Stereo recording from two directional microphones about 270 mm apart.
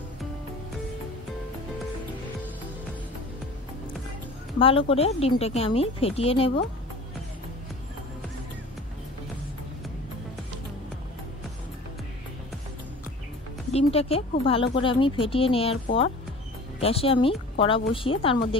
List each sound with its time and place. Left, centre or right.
4.6 s speech: centre
13.7 s speech: left